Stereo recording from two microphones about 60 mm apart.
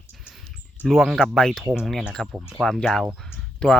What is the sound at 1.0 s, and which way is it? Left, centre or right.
Speech, centre.